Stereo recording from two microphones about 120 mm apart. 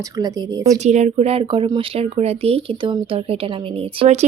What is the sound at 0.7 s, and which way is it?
Speech, 75° right (ahead or behind).